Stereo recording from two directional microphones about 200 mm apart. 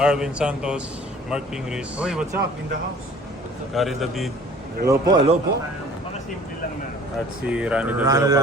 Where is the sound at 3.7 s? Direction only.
Centre (ahead or behind).